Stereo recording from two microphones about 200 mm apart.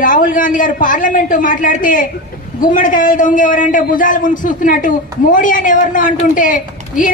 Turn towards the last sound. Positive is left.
turn(degrees=40)  # may be behind; listen again after turning